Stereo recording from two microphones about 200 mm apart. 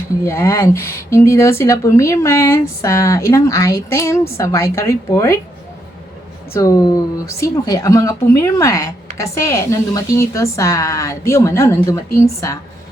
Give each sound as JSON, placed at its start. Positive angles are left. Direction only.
{"t": 0.3, "sound": "speech", "side_deg": 15}
{"t": 6.5, "sound": "speech", "side_deg": 15}